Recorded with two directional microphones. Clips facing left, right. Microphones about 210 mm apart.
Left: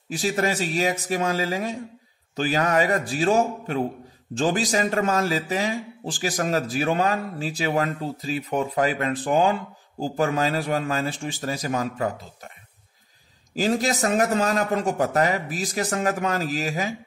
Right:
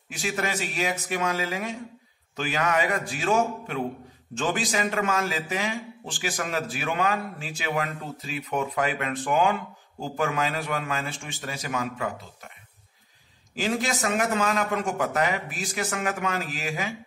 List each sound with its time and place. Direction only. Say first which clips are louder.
0.1 s a man's voice: left 5 dB; 35° left (ahead or behind)
13.6 s a man's voice: left 4 dB; 40° left (ahead or behind)